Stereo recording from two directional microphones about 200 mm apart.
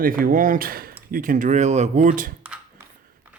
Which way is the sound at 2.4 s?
5° right (ahead or behind).